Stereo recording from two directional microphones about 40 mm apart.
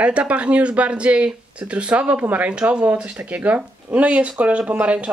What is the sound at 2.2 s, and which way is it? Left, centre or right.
Speech, right.